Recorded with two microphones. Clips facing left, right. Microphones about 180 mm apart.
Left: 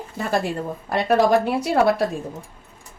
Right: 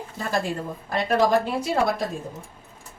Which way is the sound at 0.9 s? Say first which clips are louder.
Left 3 dB; 65° left (ahead or behind).